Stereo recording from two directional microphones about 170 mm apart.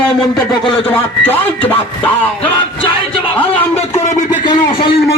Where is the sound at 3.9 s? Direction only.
45° left (ahead or behind).